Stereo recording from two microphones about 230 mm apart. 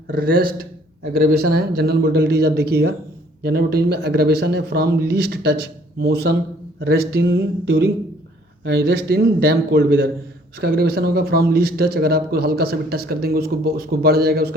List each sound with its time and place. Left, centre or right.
0.1 s a man's voice: right